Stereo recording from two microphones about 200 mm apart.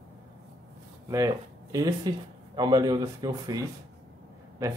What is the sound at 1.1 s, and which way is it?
Speech, 15° right (ahead or behind).